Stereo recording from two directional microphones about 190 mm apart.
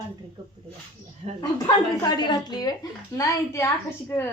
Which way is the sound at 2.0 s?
20° left (ahead or behind).